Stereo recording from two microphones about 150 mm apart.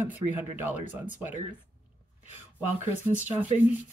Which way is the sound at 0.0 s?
15° right (ahead or behind).